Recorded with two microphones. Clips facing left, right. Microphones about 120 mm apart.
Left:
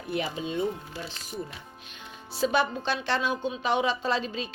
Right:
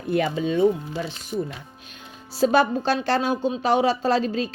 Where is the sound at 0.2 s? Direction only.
75° right (ahead or behind).